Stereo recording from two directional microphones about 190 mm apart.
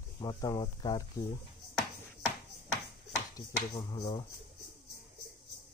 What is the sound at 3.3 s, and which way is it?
Speech, 20° left (ahead or behind).